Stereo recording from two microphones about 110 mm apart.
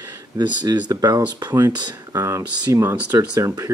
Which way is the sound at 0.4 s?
40° right (ahead or behind).